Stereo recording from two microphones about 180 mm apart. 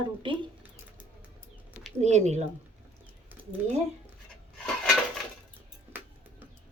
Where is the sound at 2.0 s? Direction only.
40° right (ahead or behind).